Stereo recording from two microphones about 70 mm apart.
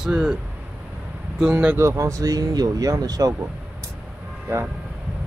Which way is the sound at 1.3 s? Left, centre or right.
Centre.